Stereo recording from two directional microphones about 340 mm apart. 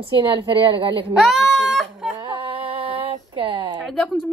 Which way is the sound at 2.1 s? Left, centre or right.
Centre.